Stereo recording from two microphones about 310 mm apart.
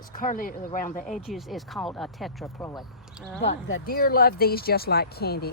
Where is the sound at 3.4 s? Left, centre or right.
Left.